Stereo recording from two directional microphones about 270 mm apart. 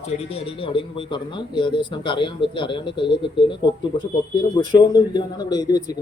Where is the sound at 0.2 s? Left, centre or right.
Left.